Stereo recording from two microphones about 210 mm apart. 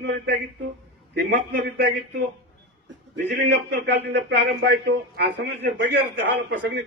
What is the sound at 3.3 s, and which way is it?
A man's voice, 50° right (ahead or behind).